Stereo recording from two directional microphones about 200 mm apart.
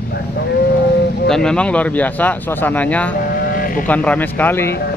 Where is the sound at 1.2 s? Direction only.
5° left (ahead or behind).